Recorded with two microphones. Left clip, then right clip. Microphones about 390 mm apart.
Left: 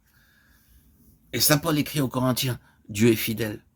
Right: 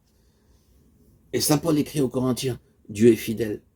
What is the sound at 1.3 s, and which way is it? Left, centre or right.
Speech, left.